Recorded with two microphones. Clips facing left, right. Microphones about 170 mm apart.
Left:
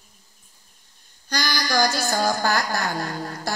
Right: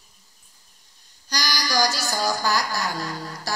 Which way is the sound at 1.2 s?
55° left (ahead or behind).